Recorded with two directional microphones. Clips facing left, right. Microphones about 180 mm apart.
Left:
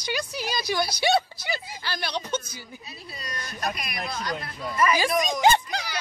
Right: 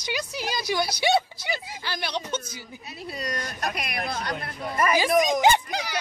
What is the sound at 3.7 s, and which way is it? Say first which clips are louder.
Speech: right 3 dB; 60° right (ahead or behind).